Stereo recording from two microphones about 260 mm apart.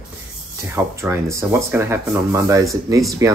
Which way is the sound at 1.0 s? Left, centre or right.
Centre.